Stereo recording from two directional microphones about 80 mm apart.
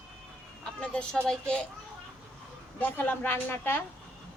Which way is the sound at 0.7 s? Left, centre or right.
Centre.